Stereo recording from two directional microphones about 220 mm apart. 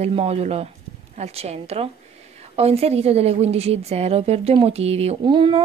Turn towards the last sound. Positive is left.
turn(degrees=-20)  # may be behind; listen again after turning